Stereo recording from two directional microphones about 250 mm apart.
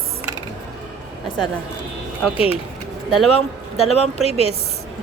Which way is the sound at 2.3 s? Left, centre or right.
Left.